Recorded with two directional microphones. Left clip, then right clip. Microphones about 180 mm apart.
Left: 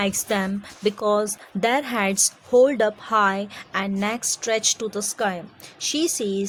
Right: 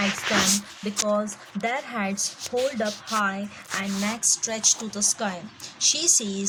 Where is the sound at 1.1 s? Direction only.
50° left (ahead or behind).